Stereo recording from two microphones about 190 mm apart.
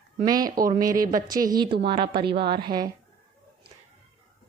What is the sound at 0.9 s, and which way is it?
Speech, 45° right (ahead or behind).